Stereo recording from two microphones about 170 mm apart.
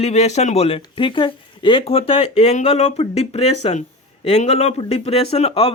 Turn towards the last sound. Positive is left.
turn(degrees=35)  # may be behind; listen again after turning